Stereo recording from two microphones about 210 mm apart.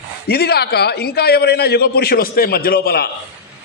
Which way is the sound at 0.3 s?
50° left (ahead or behind).